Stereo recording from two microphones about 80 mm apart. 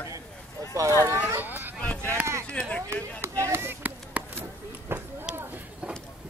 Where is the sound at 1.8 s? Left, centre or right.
Left.